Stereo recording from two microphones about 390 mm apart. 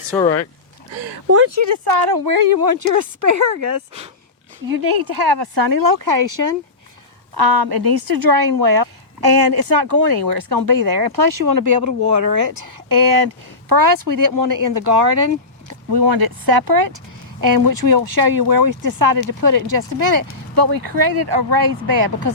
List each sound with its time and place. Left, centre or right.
0.1 s speech: centre
1.3 s speech: right
1.6 s speech: right
4.7 s speech: right
7.3 s speech: right